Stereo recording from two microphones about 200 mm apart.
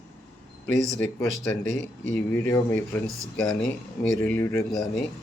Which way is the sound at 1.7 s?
65° left (ahead or behind).